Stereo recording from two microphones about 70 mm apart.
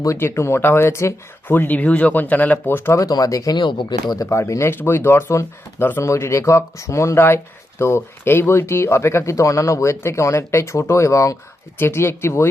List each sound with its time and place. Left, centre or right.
0.0 s speech: left
1.5 s speech: left
2.6 s speech: left
3.0 s speech: left
3.5 s speech: left
4.2 s speech: left
4.7 s speech: left
11.8 s speech: left